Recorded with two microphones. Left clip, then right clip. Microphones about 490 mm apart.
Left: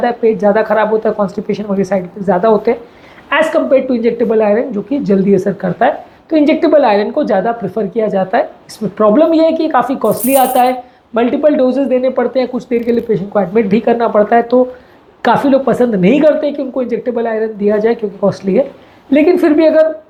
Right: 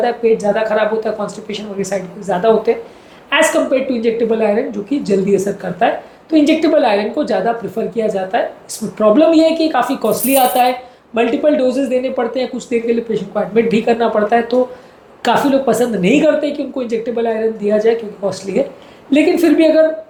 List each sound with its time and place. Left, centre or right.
0.0 s a woman's voice: left
10.3 s speech: centre
11.1 s a woman's voice: left